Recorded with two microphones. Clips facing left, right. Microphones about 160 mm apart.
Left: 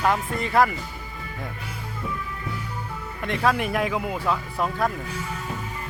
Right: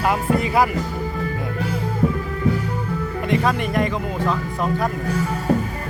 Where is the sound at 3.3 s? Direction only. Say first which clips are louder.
Right 2 dB; centre (ahead or behind).